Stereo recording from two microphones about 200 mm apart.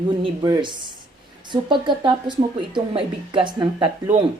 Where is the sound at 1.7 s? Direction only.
25° right (ahead or behind).